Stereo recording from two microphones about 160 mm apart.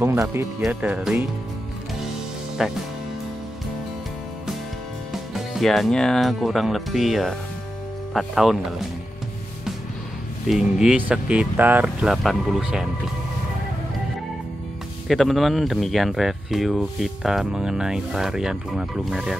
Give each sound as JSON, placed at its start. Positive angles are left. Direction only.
{"t": 0.0, "sound": "speech", "side_deg": -15}
{"t": 2.6, "sound": "speech", "side_deg": 0}
{"t": 5.1, "sound": "speech", "side_deg": 0}
{"t": 10.5, "sound": "speech", "side_deg": -5}
{"t": 15.0, "sound": "speech", "side_deg": 0}